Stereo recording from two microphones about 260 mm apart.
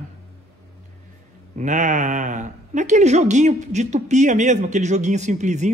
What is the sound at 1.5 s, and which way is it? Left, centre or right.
Speech, right.